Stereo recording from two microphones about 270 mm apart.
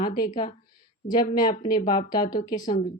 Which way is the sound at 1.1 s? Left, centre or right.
Centre.